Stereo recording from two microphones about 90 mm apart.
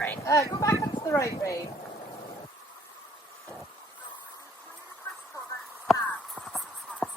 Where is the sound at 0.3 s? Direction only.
35° left (ahead or behind).